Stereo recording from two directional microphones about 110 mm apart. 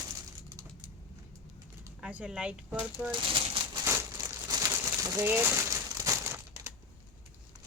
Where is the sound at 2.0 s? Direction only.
10° right (ahead or behind).